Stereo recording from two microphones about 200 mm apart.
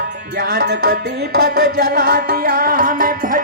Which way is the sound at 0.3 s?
50° right (ahead or behind).